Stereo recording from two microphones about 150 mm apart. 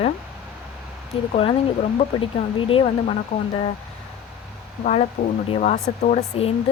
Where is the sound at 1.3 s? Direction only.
40° left (ahead or behind).